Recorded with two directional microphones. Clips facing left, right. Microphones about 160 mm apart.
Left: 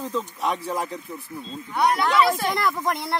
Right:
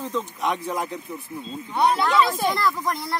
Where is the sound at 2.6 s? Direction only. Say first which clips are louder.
Even; 20° left (ahead or behind).